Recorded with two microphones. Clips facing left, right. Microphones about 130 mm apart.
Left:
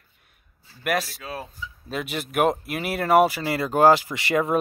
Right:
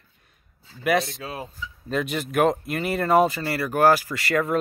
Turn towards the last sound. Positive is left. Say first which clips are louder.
# left 1 dB
turn(degrees=20)  # may be behind; listen again after turning